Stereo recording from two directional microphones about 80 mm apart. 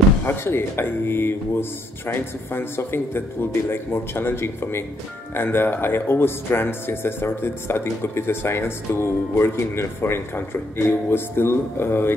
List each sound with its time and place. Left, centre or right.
0.2 s speech: left